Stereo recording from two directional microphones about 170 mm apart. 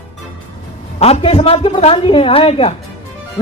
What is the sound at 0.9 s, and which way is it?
A man's voice, 35° left (ahead or behind).